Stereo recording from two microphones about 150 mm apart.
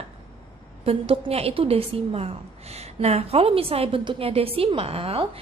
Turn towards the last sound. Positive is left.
turn(degrees=-40)  # may be behind; listen again after turning